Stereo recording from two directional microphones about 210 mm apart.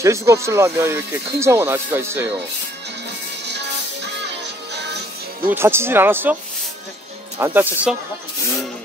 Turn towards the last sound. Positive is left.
turn(degrees=-10)  # may be behind; listen again after turning